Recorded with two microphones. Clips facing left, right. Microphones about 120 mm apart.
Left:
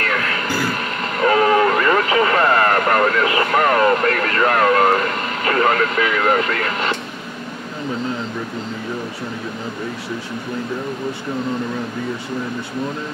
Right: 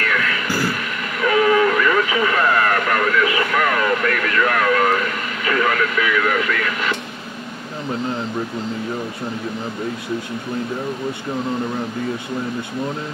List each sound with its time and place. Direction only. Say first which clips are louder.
0.0 s vehicle: even; 40° left (ahead or behind)